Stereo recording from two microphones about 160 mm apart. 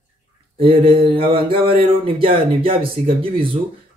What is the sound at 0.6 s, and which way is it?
Speech, 35° right (ahead or behind).